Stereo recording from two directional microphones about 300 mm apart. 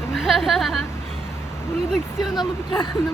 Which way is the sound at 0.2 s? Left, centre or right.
Centre.